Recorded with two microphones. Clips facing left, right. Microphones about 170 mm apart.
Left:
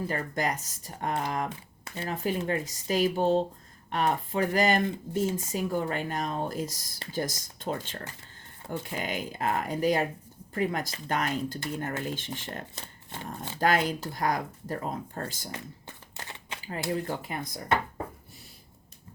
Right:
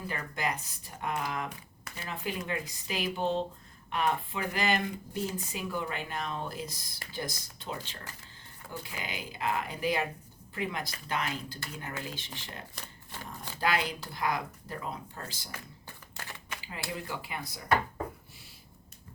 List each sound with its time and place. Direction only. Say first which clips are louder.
0.1 s speech: left 4 dB; 40° left (ahead or behind)
1.5 s a sound: left 4 dB; 30° left (ahead or behind)
2.0 s speech: left 6 dB; 40° left (ahead or behind)
12.7 s speech: left 3 dB; 20° left (ahead or behind)
13.6 s speech: left 5 dB; 45° left (ahead or behind)
16.1 s shuffling cards: left 1 dB; 20° left (ahead or behind)
17.1 s speech: left 5 dB; 45° left (ahead or behind)